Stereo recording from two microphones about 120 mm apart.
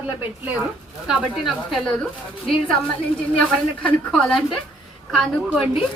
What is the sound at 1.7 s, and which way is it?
Speech, 5° left (ahead or behind).